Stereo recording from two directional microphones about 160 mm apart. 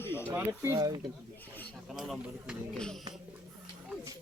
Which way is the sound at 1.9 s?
5° right (ahead or behind).